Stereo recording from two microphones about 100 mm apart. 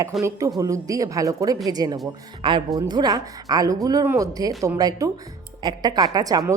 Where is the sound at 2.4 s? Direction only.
55° right (ahead or behind).